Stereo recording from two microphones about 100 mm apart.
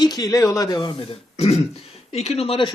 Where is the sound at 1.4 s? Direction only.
90° left; by 2.7 s 70° left (ahead or behind).